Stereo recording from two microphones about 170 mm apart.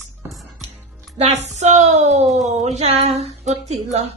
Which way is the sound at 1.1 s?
40° right (ahead or behind).